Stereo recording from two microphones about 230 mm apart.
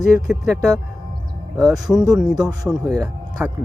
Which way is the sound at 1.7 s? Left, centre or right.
Centre.